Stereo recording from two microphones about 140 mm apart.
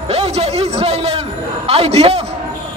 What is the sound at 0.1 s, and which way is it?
A man's voice, 45° right (ahead or behind).